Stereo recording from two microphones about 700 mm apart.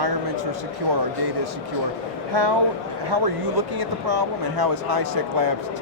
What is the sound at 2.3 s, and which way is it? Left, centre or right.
Speech, right.